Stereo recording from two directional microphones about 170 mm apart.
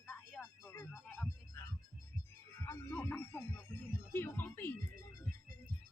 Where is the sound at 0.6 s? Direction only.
15° left (ahead or behind).